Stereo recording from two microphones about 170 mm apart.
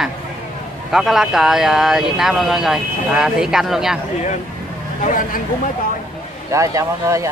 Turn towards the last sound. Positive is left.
turn(degrees=-20)  # may be behind; listen again after turning